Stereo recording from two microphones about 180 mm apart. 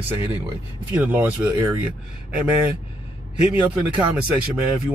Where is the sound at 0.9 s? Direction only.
10° right (ahead or behind).